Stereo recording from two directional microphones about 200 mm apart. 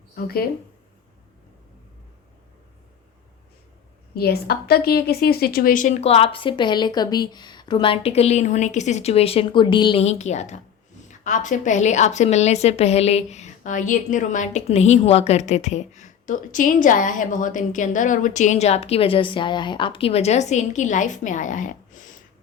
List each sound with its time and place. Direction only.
0.2 s speech: 50° left (ahead or behind)
4.1 s a woman's voice: 50° left (ahead or behind)